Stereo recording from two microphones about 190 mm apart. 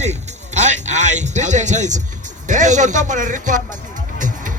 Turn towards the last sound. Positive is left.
turn(degrees=-45)  # may be behind; listen again after turning